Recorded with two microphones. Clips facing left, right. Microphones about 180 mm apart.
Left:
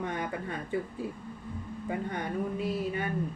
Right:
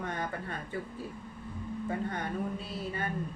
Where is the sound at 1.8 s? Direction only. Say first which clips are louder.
Left 1 dB; 15° left (ahead or behind).